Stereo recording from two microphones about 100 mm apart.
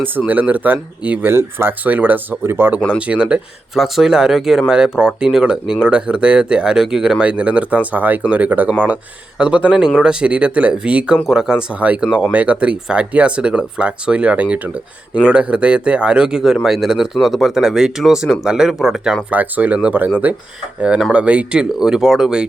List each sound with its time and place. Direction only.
0.3 s speech: 15° right (ahead or behind)
3.0 s speech: 10° right (ahead or behind)
19.3 s speech: 15° right (ahead or behind)